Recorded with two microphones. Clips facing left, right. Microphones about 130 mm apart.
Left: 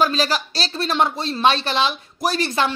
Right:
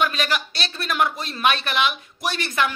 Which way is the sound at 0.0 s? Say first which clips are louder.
Left 3 dB; 30° left (ahead or behind).